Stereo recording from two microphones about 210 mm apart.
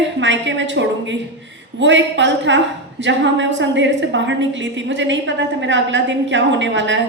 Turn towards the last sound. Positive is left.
turn(degrees=-60)  # may be behind; listen again after turning